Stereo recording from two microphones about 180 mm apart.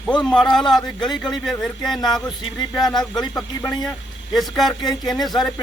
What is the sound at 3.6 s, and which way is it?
Speech, 20° left (ahead or behind).